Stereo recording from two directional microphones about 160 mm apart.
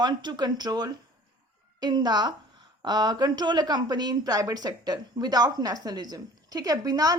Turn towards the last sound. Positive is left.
turn(degrees=-25)  # may be behind; listen again after turning